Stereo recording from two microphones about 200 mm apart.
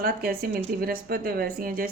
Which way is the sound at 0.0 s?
50° right (ahead or behind).